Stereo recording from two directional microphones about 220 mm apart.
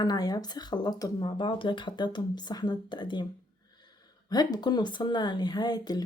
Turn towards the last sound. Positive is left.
turn(degrees=20)  # may be behind; listen again after turning